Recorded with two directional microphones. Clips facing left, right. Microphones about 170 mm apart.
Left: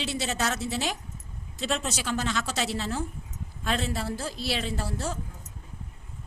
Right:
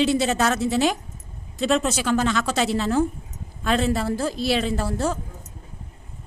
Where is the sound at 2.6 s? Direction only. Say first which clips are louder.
Right 8 dB; 55° right (ahead or behind).